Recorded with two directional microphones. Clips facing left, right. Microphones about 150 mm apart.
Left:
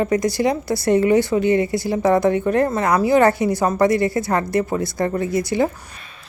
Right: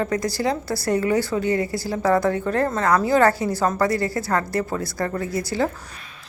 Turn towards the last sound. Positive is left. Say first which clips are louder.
# left 4 dB
turn(degrees=20)  # may be behind; listen again after turning